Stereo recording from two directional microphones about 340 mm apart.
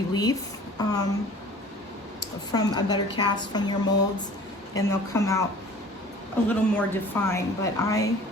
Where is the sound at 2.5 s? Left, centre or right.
Centre.